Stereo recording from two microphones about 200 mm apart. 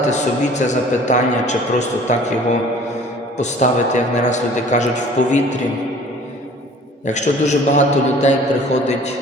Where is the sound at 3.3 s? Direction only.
35° left (ahead or behind).